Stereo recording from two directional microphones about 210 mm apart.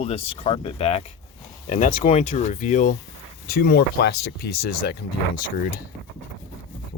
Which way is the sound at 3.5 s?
45° left (ahead or behind).